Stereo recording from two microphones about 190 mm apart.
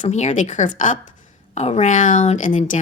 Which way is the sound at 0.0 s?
40° left (ahead or behind).